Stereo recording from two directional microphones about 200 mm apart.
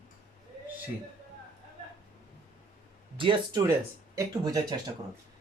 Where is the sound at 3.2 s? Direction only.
25° right (ahead or behind).